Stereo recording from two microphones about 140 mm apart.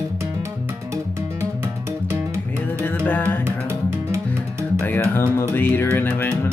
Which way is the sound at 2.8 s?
10° left (ahead or behind).